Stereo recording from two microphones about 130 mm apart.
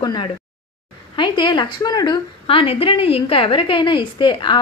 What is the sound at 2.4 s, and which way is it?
A woman's voice, 45° left (ahead or behind).